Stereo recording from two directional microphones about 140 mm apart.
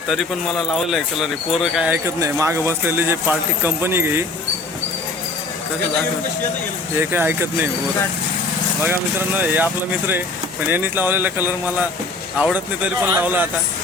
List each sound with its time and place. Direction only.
0.1 s speech: centre (ahead or behind)
2.2 s speech: 20° right (ahead or behind)
6.9 s speech: 15° right (ahead or behind)
8.8 s speech: 15° right (ahead or behind)
10.7 s speech: 15° right (ahead or behind)